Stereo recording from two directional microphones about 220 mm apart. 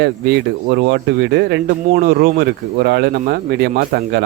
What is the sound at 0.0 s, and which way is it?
Speech, 50° right (ahead or behind).